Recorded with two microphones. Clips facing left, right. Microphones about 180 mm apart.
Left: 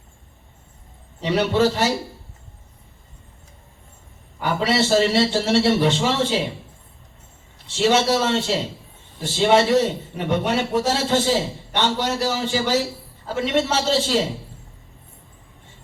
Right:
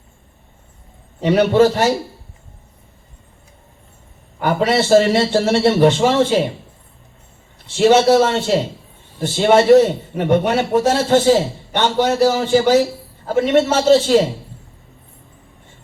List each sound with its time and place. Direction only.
1.2 s a man's voice: 50° right (ahead or behind)
4.4 s a man's voice: 50° right (ahead or behind)
7.7 s a man's voice: 50° right (ahead or behind)